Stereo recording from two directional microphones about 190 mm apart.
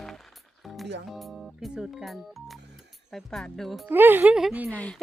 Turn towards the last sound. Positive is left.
turn(degrees=5)  # may be behind; listen again after turning